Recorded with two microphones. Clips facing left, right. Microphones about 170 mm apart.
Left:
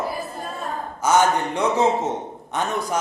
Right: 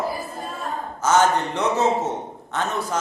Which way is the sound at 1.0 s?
10° left (ahead or behind).